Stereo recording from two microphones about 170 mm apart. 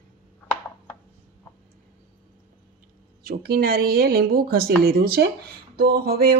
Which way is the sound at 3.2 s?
60° right (ahead or behind).